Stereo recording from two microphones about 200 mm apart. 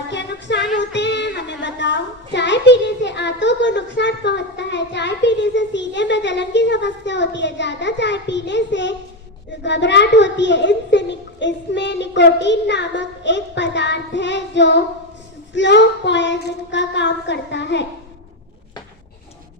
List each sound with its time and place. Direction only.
0.1 s music: 60° left (ahead or behind)
0.8 s a woman's voice: 60° left (ahead or behind)